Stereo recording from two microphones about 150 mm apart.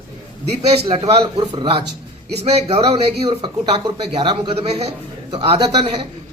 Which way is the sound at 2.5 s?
45° right (ahead or behind).